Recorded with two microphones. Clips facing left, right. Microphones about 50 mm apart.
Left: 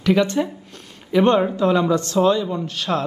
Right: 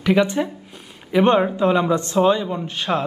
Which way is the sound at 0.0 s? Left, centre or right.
Centre.